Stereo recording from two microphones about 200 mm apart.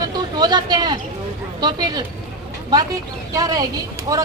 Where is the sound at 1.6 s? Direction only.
20° right (ahead or behind).